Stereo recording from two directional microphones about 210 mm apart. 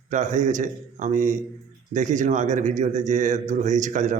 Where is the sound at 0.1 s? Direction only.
35° right (ahead or behind).